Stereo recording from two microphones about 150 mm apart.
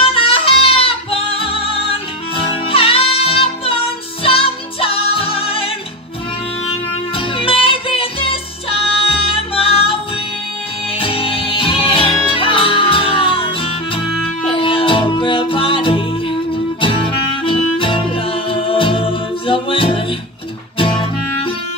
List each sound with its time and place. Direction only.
0.0 s music: 35° left (ahead or behind)
7.2 s music: 35° left (ahead or behind)
11.0 s music: 35° left (ahead or behind)